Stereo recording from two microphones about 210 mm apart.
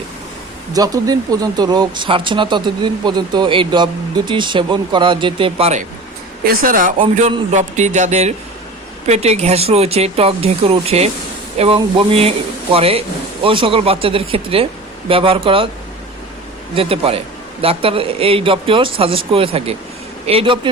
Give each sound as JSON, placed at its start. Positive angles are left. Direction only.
{"t": 0.7, "sound": "speech", "side_deg": -20}
{"t": 6.4, "sound": "a man's voice", "side_deg": -45}
{"t": 16.7, "sound": "speech", "side_deg": -25}